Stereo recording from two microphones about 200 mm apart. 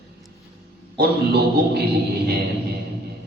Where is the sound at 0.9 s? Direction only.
50° right (ahead or behind).